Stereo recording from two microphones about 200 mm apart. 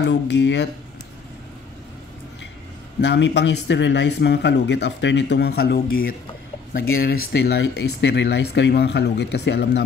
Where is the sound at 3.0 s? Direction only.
60° left (ahead or behind).